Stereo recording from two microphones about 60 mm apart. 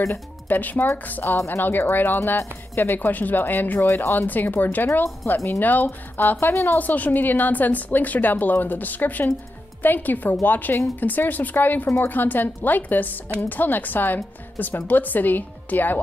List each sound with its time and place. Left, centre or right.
0.5 s speech: left